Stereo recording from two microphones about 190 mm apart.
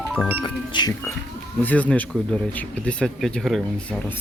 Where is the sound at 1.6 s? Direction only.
10° left (ahead or behind).